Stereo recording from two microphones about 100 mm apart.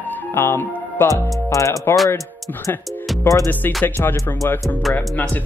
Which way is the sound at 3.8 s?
20° left (ahead or behind).